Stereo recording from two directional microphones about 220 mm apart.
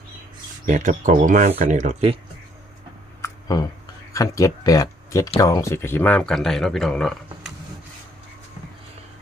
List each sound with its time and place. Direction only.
0.6 s speech: 35° right (ahead or behind)
3.2 s a sound: 15° left (ahead or behind)
4.1 s speech: 15° left (ahead or behind)